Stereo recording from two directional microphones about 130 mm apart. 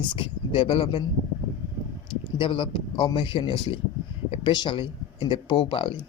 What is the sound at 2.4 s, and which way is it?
Speech, 40° left (ahead or behind).